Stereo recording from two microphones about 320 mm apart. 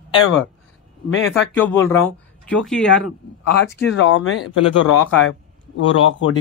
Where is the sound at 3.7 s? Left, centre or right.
Left.